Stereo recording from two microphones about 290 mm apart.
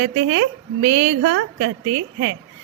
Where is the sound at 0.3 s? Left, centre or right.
Right.